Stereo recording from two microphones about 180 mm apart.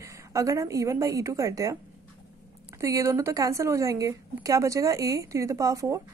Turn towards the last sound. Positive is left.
turn(degrees=-15)  # may be behind; listen again after turning